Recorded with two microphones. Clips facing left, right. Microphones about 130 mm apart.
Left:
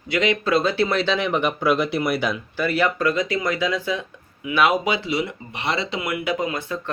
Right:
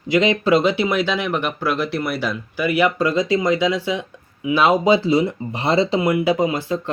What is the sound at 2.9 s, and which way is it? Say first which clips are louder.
Speech: right 3 dB; 25° right (ahead or behind).